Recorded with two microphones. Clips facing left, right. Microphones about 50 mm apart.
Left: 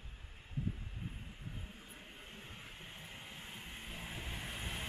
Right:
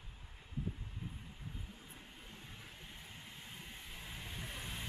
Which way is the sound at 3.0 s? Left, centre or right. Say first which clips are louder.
Left 2 dB; left.